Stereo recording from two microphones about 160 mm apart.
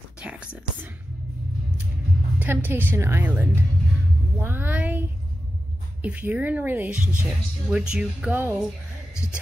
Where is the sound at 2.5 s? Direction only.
15° right (ahead or behind).